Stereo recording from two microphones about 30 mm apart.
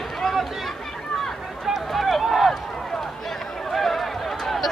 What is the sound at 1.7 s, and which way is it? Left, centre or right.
Run, centre.